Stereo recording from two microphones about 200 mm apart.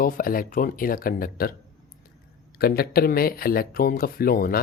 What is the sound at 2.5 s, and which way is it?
Speech, 50° left (ahead or behind).